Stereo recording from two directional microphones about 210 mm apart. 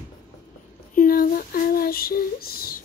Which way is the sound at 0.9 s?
45° left (ahead or behind).